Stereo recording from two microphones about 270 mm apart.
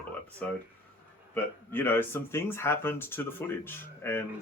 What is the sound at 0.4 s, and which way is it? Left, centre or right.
Speech, centre.